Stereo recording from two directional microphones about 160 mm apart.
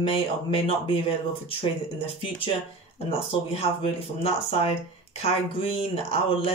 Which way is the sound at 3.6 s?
40° left (ahead or behind).